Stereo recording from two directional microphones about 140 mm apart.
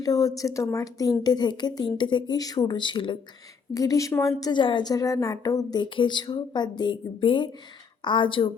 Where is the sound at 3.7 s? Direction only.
25° left (ahead or behind).